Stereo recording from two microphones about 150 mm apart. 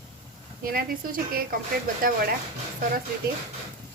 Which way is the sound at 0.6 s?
75° right (ahead or behind).